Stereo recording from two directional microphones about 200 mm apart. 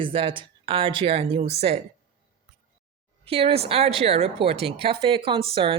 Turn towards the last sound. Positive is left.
turn(degrees=-25)  # may be behind; listen again after turning